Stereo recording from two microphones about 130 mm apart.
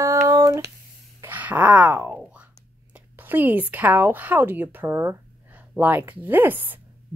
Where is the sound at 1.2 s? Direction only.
15° right (ahead or behind).